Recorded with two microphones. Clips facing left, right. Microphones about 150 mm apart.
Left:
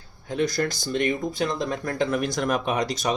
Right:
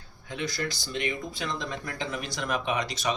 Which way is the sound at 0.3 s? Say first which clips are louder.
Left 8 dB; 40° left (ahead or behind).